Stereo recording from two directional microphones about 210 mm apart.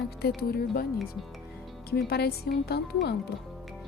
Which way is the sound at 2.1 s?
50° left (ahead or behind).